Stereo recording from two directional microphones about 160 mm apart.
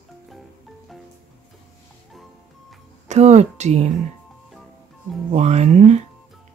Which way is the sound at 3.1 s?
45° right (ahead or behind).